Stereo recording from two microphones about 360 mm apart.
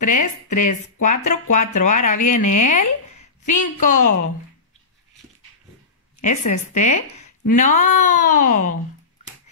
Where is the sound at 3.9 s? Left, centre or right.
Left.